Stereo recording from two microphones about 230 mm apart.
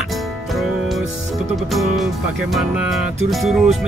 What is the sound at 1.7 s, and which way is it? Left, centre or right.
Speech, centre.